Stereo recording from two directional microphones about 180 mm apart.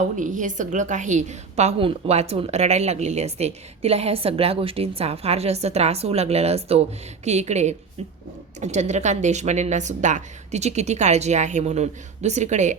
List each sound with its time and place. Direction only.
0.2 s a woman's voice: 45° right (ahead or behind)